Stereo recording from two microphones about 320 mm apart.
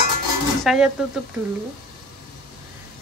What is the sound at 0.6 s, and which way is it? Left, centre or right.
Speech, centre.